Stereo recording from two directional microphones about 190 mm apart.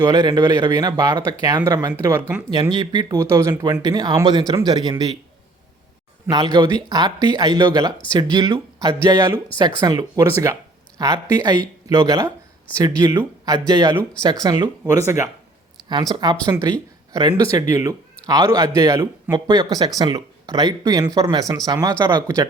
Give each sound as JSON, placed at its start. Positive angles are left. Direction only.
{"t": 0.0, "sound": "speech", "side_deg": -20}
{"t": 6.3, "sound": "speech", "side_deg": -20}